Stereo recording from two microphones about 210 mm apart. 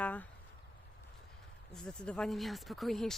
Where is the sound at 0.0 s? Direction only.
5° left (ahead or behind).